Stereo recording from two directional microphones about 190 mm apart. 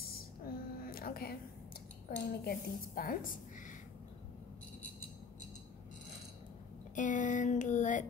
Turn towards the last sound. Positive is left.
turn(degrees=40)  # may be behind; listen again after turning